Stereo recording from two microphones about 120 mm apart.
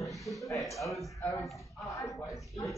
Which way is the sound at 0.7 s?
Centre (ahead or behind).